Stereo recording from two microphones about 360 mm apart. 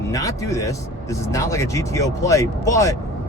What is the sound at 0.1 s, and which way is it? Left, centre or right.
Speech, centre.